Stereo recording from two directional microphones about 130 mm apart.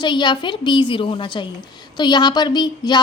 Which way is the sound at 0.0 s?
35° left (ahead or behind).